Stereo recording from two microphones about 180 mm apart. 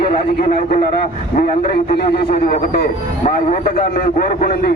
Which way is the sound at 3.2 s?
45° left (ahead or behind).